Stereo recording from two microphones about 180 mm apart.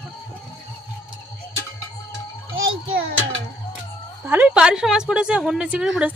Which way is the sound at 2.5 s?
90° right.